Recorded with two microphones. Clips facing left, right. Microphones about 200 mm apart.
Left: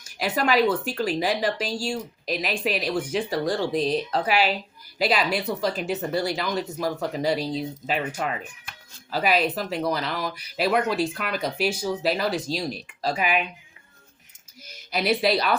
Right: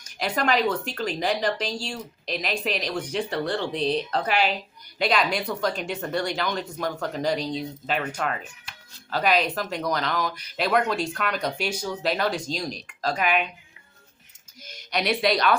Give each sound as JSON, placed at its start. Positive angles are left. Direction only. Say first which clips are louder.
{"t": 0.2, "sound": "speech", "louder": "left 2 dB", "side_deg": 5}
{"t": 3.8, "sound": "speech", "louder": "even", "side_deg": 40}
{"t": 4.1, "sound": "speech", "louder": "left 1 dB", "side_deg": 10}
{"t": 14.7, "sound": "speech", "louder": "left 2 dB", "side_deg": 5}